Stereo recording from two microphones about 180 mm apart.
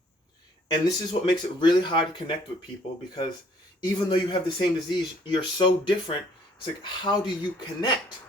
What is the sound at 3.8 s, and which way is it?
A man's voice, 25° left (ahead or behind).